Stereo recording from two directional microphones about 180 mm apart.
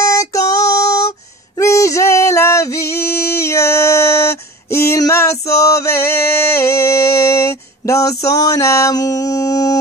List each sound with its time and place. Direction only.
0.0 s female singing: 20° left (ahead or behind)
1.6 s music: 15° left (ahead or behind)